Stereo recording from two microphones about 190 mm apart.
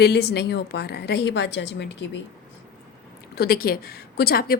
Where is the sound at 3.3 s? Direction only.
55° left (ahead or behind).